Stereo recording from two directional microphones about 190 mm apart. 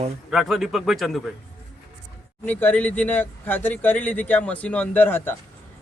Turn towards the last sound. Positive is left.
turn(degrees=10)  # may be behind; listen again after turning